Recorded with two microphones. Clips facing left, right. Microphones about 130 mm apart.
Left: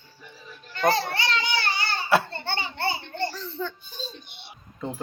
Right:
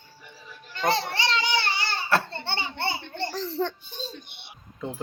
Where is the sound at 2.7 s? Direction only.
25° right (ahead or behind).